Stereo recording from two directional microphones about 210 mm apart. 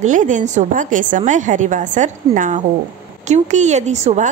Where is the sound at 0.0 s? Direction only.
35° right (ahead or behind).